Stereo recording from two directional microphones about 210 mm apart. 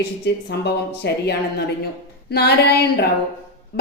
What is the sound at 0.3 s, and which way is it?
A woman's voice, 50° left (ahead or behind).